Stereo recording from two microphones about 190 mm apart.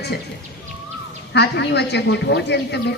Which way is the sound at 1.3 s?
65° left (ahead or behind).